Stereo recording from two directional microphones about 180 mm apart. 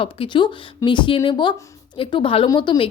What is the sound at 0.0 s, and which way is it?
Speech, 30° left (ahead or behind).